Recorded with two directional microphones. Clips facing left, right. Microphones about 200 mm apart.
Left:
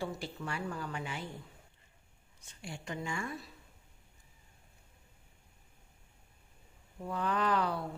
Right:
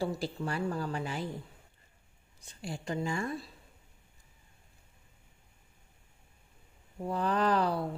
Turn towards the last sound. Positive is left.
turn(degrees=-35)  # may be behind; listen again after turning